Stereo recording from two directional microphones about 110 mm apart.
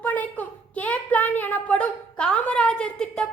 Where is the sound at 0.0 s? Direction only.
15° left (ahead or behind).